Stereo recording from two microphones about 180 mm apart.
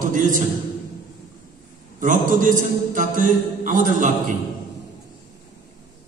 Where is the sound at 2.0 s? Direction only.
45° right (ahead or behind).